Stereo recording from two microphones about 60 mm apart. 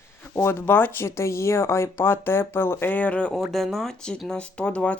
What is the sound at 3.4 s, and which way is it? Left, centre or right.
Speech, centre.